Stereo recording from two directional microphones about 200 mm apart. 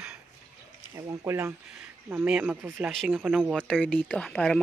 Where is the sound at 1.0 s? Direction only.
15° right (ahead or behind).